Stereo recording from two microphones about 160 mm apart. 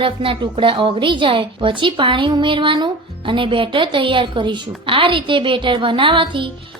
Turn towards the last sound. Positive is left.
turn(degrees=-30)  # may be behind; listen again after turning